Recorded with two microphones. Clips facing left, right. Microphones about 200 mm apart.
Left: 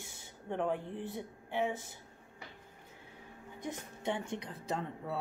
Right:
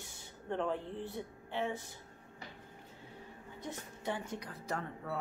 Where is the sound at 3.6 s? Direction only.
15° left (ahead or behind).